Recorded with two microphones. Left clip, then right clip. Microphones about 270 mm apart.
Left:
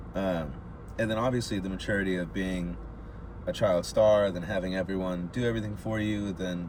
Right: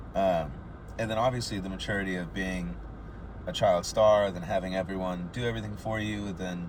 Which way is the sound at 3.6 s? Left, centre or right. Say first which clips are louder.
Right 1 dB; left.